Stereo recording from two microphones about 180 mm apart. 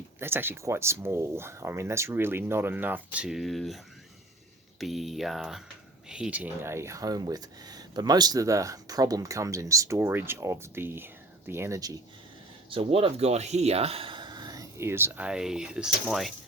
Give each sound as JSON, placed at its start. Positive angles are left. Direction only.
{"t": 0.2, "sound": "speech", "side_deg": -10}
{"t": 4.8, "sound": "speech", "side_deg": 0}
{"t": 12.7, "sound": "speech", "side_deg": -30}